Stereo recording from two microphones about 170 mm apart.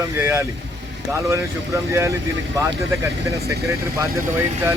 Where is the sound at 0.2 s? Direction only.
15° right (ahead or behind).